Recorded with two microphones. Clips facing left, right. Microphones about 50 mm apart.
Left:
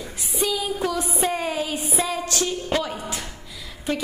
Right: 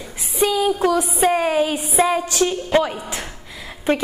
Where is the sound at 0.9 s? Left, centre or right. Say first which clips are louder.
Right 7 dB; centre.